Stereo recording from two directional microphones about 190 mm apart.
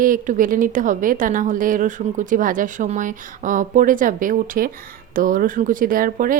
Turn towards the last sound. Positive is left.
turn(degrees=-45)  # may be behind; listen again after turning